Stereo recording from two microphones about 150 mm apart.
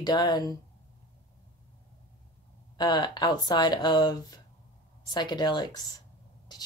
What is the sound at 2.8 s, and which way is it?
Speech, 30° left (ahead or behind).